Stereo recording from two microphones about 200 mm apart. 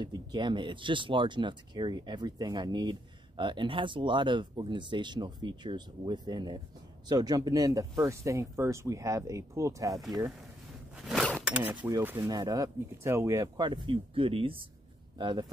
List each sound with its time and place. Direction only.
0.0 s speech: 20° right (ahead or behind)
11.1 s zipper: centre (ahead or behind)
11.4 s speech: 5° right (ahead or behind); by 15.4 s 25° right (ahead or behind)